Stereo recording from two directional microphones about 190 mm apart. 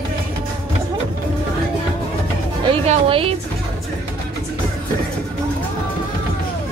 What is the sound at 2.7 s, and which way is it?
Music, 30° right (ahead or behind).